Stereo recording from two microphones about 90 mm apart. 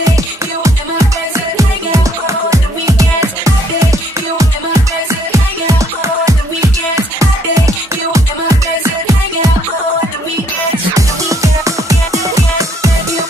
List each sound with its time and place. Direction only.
0.7 s music: 35° right (ahead or behind)
11.0 s music: 40° right (ahead or behind)